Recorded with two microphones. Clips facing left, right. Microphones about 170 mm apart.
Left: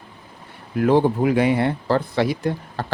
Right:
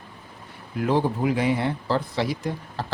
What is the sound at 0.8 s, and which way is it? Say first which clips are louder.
Speech: left 6 dB; 60° left (ahead or behind).